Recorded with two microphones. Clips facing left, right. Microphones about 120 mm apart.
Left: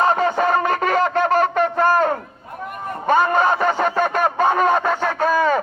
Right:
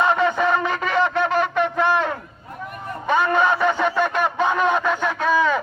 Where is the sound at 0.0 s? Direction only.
40° left (ahead or behind).